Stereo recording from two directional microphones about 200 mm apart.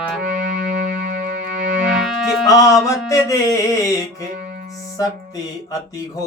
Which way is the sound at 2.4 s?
15° left (ahead or behind).